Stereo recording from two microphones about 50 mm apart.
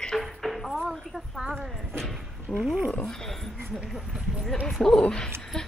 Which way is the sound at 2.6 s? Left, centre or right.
Centre.